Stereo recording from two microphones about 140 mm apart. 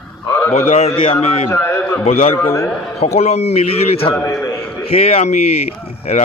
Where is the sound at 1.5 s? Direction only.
15° left (ahead or behind).